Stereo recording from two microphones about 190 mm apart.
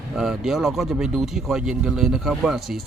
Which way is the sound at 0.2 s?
Centre (ahead or behind).